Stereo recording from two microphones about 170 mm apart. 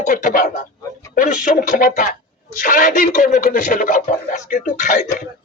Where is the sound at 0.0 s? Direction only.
50° left (ahead or behind).